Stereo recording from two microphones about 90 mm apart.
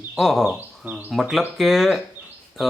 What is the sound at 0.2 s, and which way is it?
Speech, centre (ahead or behind).